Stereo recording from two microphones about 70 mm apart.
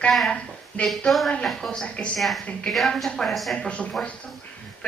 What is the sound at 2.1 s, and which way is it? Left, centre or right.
Speech, centre.